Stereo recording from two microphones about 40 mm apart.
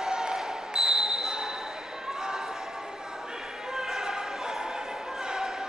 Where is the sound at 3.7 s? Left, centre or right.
Centre.